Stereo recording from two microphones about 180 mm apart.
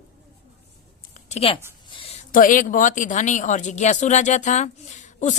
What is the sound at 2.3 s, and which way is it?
Speech, 50° left (ahead or behind).